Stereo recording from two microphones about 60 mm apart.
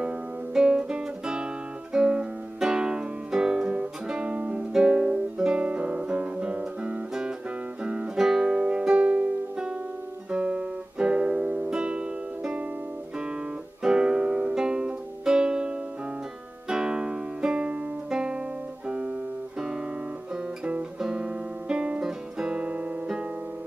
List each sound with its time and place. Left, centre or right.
0.5 s guitar: centre
7.8 s music: right
8.2 s guitar: centre
8.5 s music: centre
10.3 s guitar: centre
11.7 s music: centre
13.8 s music: centre
20.3 s guitar: right